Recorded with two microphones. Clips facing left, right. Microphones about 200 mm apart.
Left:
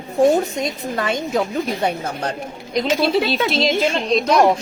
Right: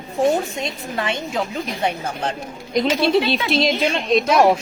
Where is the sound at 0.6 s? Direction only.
40° left (ahead or behind).